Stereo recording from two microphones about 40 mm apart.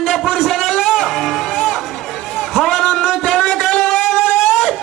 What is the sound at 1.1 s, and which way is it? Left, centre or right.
Music, centre.